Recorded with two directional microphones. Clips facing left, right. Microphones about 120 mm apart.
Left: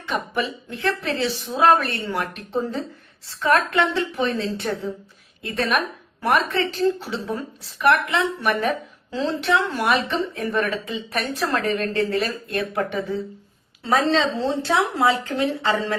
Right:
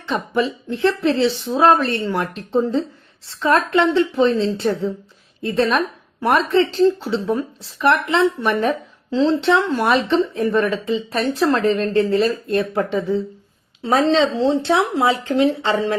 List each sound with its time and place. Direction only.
0.1 s a woman's voice: 30° right (ahead or behind)